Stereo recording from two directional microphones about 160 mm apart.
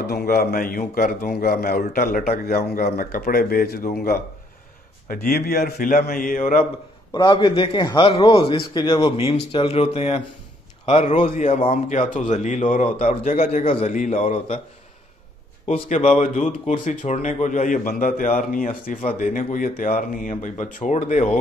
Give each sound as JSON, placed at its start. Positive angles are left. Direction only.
{"t": 0.0, "sound": "a man's voice", "side_deg": 75}
{"t": 7.1, "sound": "a man's voice", "side_deg": 25}
{"t": 15.6, "sound": "speech", "side_deg": 40}